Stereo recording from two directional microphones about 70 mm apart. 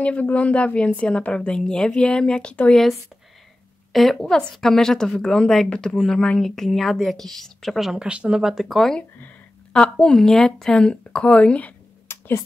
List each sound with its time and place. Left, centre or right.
0.0 s speech: left
3.9 s speech: centre
12.1 s a sound: left